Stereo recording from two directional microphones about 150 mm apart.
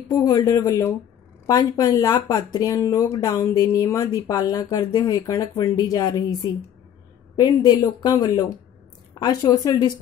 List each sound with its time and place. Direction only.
0.1 s speech: 25° left (ahead or behind)